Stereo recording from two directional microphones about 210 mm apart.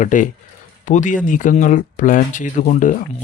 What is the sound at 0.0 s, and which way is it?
Speech, 35° left (ahead or behind).